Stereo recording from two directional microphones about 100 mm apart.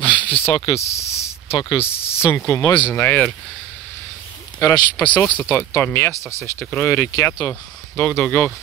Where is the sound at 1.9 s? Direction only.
75° left (ahead or behind).